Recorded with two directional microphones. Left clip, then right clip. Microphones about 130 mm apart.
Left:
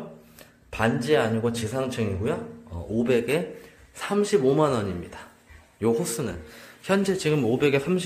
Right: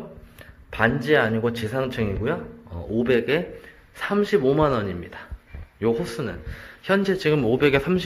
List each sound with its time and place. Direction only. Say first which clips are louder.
0.7 s a man's voice: right 3 dB; 5° left (ahead or behind)